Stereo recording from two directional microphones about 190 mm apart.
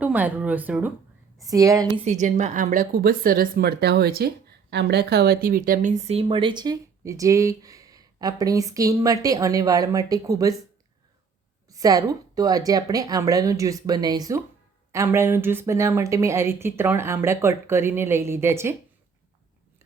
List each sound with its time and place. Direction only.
0.0 s speech: 10° right (ahead or behind)
2.0 s speech: 40° right (ahead or behind); by 10.5 s 20° right (ahead or behind)
11.7 s a woman's voice: 20° right (ahead or behind)